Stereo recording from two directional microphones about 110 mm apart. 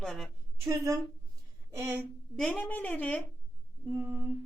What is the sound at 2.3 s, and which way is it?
Speech, 10° left (ahead or behind).